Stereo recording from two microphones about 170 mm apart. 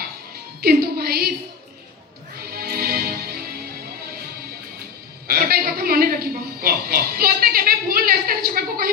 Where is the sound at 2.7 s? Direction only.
60° right (ahead or behind).